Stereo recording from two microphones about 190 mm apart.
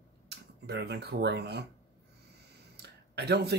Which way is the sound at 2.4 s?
60° right (ahead or behind).